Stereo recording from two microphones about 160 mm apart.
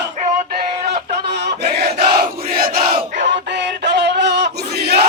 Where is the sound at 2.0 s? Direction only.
35° right (ahead or behind).